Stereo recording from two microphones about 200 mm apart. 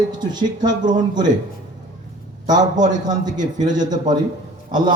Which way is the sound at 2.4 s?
20° right (ahead or behind).